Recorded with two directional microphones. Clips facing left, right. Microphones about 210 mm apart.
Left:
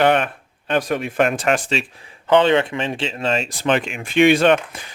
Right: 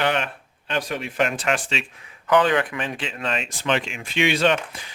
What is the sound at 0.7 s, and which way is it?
Speech, 50° left (ahead or behind).